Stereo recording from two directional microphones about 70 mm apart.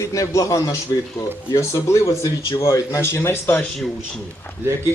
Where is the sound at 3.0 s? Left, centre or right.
Left.